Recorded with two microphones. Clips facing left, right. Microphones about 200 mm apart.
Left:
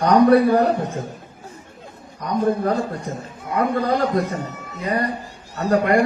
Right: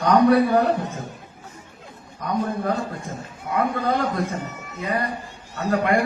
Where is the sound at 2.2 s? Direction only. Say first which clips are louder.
Left 4 dB; 45° left (ahead or behind).